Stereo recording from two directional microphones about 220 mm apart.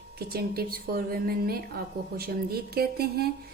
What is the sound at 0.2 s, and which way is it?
A woman's voice, 45° right (ahead or behind).